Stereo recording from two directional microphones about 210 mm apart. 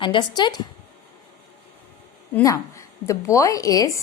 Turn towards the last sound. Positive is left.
turn(degrees=15)  # may be behind; listen again after turning